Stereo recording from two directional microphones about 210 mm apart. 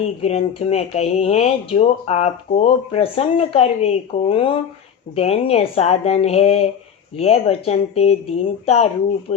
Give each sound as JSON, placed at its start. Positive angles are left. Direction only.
{"t": 0.0, "sound": "speech", "side_deg": 30}